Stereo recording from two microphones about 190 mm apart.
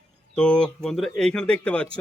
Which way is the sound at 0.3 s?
5° left (ahead or behind).